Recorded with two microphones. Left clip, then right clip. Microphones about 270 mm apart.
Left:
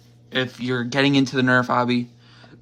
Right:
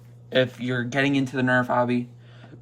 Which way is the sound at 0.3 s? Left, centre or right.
Centre.